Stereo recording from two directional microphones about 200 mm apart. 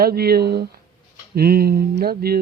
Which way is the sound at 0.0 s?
50° right (ahead or behind).